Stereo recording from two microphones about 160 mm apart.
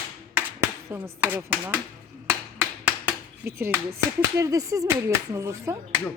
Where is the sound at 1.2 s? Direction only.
10° right (ahead or behind).